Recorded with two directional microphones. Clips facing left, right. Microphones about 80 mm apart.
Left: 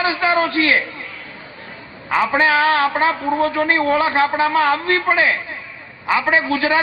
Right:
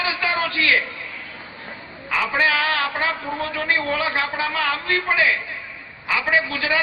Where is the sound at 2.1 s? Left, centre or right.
Left.